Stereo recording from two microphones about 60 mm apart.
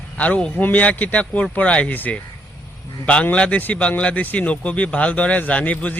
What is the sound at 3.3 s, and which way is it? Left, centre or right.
Speech, centre.